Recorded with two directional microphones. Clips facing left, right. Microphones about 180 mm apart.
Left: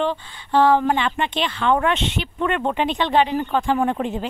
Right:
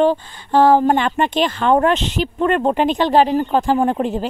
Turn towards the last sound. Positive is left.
turn(degrees=-40)  # may be behind; listen again after turning